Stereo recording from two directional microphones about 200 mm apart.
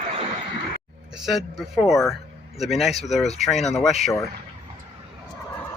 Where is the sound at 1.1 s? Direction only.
Centre (ahead or behind).